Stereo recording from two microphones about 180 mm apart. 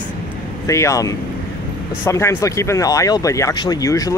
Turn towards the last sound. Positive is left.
turn(degrees=20)  # may be behind; listen again after turning